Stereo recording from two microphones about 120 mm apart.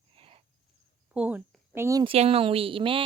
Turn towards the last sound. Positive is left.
turn(degrees=-45)  # may be behind; listen again after turning